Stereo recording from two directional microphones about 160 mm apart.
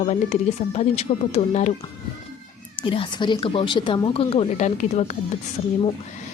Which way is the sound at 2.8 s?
35° left (ahead or behind).